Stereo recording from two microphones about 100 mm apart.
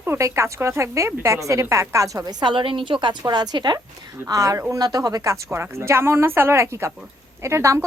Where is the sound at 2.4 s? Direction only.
60° right (ahead or behind).